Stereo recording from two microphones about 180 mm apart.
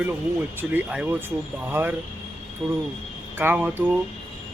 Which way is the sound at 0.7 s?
10° right (ahead or behind).